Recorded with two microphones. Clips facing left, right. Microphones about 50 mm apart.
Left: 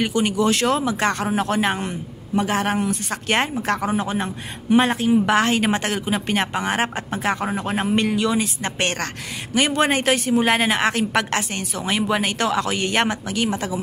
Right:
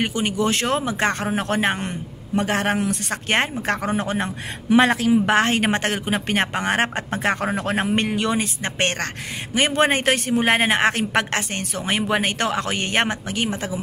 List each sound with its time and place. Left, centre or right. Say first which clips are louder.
0.0 s a woman's voice: left 2 dB; right
3.6 s a woman's voice: left 1 dB; right
4.6 s speech: right 1 dB; right
5.2 s a woman's voice: even; right